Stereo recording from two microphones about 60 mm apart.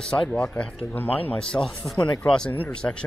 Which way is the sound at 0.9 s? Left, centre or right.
Left.